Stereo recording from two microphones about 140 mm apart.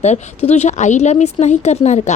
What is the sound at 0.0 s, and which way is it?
Speech, 50° left (ahead or behind).